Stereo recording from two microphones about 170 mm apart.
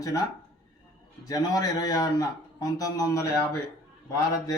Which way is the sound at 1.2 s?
20° left (ahead or behind).